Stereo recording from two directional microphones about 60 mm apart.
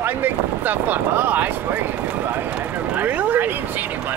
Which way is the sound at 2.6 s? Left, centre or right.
Right.